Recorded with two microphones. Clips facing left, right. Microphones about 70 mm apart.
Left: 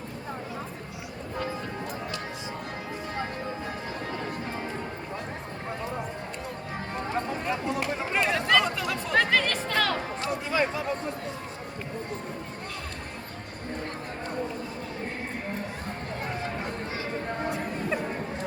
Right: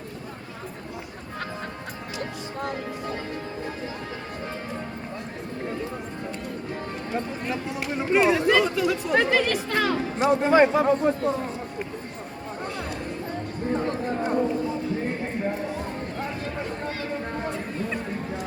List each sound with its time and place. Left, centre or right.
7.4 s speech: centre
10.4 s a man's voice: right